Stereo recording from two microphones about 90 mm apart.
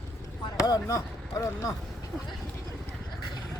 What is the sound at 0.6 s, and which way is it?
Chop, 40° left (ahead or behind).